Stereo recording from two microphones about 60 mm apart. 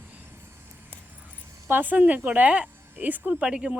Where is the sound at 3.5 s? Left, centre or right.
Centre.